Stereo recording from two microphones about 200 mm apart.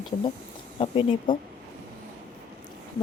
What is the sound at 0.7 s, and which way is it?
Speech, 25° left (ahead or behind).